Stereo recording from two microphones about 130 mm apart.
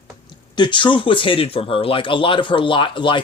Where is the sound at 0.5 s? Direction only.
35° left (ahead or behind).